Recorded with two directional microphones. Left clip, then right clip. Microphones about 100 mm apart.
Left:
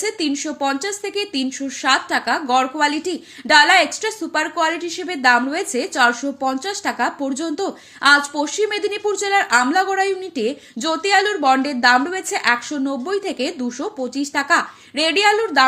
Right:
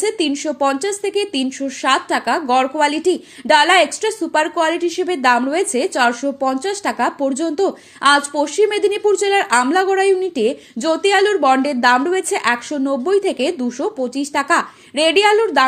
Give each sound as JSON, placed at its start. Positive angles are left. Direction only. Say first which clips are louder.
{"t": 0.0, "sound": "speech", "louder": "right 4 dB", "side_deg": -35}